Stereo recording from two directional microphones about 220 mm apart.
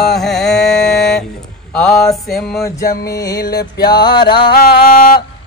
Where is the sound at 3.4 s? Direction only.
45° left (ahead or behind).